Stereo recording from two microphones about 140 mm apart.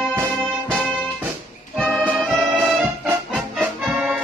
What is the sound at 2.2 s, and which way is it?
Music, centre (ahead or behind).